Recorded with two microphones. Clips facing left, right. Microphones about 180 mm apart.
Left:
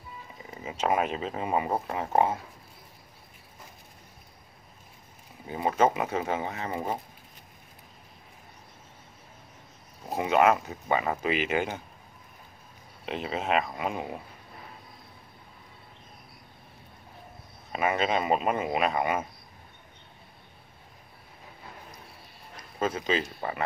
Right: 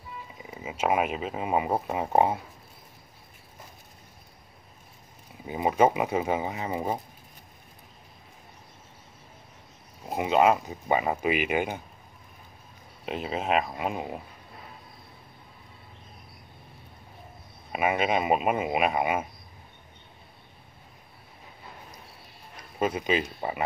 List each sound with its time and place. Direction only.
0.4 s speech: 10° right (ahead or behind)
5.5 s speech: 15° right (ahead or behind)
10.1 s speech: 20° right (ahead or behind)
13.0 s speech: 5° right (ahead or behind)
17.7 s speech: 10° right (ahead or behind)
22.8 s speech: 15° right (ahead or behind)